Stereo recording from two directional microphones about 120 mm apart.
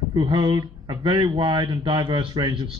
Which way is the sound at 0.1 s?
40° right (ahead or behind).